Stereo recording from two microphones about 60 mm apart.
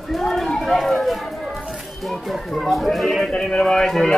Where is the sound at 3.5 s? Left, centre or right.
Centre.